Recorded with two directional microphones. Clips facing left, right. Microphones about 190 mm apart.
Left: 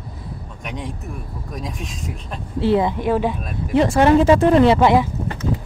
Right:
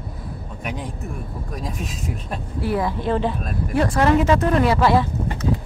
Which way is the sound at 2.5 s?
25° left (ahead or behind).